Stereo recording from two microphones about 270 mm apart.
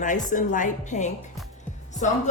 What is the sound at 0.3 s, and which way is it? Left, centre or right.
A woman's voice, left.